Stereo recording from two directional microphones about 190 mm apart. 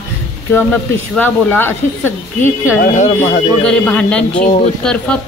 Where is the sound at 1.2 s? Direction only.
10° left (ahead or behind).